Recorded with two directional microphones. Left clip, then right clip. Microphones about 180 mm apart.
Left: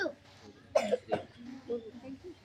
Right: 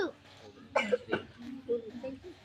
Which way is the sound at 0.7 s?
15° right (ahead or behind).